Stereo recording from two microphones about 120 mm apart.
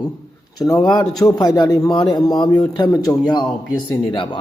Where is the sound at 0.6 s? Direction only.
30° left (ahead or behind).